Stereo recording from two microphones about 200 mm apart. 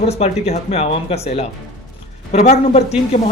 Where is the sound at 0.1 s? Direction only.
30° left (ahead or behind).